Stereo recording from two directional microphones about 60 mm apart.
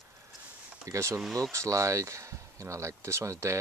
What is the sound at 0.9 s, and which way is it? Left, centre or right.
Speech, right.